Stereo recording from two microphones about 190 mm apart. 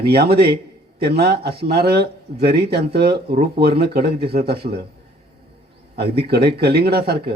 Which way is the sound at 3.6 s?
55° right (ahead or behind).